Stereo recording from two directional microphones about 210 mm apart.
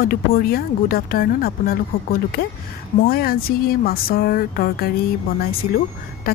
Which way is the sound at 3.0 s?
45° left (ahead or behind).